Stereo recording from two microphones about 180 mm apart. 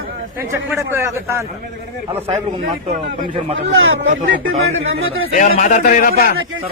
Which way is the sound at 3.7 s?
90° right.